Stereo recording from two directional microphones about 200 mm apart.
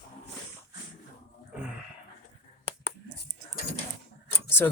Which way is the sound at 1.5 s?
5° right (ahead or behind).